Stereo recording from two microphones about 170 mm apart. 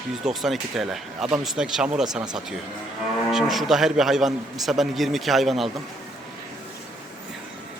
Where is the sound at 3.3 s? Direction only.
Centre (ahead or behind).